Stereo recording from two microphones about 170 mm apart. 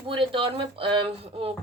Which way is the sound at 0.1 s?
30° right (ahead or behind).